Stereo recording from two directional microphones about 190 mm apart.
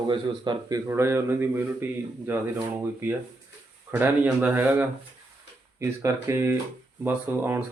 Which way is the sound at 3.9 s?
10° right (ahead or behind).